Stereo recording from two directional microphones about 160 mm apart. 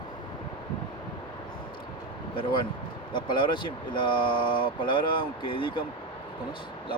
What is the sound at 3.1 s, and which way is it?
Speech, 30° left (ahead or behind).